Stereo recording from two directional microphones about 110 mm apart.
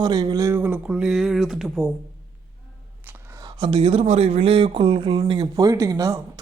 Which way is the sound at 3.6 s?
55° right (ahead or behind).